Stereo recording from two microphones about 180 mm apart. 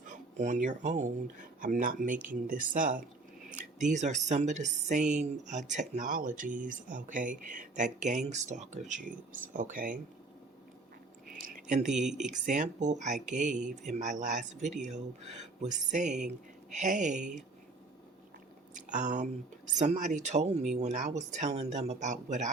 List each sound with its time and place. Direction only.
0.0 s speech: 45° right (ahead or behind)
11.4 s a sound: 45° right (ahead or behind)
12.2 s speech: 45° right (ahead or behind)
18.7 s speech: 45° right (ahead or behind)